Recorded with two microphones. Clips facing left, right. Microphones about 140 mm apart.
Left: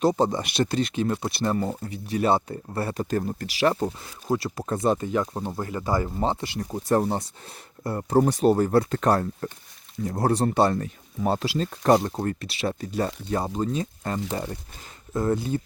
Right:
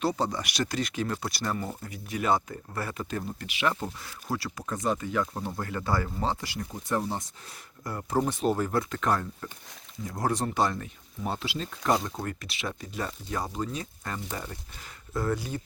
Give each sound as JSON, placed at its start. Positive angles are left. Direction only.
{"t": 0.2, "sound": "speech", "side_deg": 25}
{"t": 3.1, "sound": "speech", "side_deg": 45}
{"t": 4.0, "sound": "speech", "side_deg": 20}
{"t": 6.6, "sound": "speech", "side_deg": 40}